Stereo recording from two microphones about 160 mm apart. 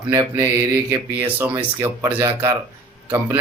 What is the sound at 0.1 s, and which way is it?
Speech, 15° right (ahead or behind).